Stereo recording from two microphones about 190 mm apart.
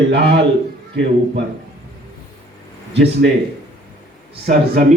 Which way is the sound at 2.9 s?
60° right (ahead or behind).